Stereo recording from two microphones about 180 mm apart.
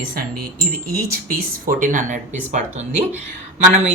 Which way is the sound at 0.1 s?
55° right (ahead or behind).